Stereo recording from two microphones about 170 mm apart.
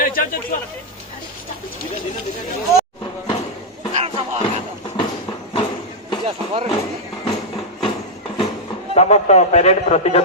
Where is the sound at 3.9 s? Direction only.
40° right (ahead or behind).